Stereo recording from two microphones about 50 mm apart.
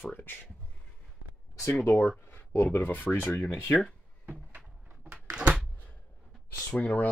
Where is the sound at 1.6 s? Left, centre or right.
Left.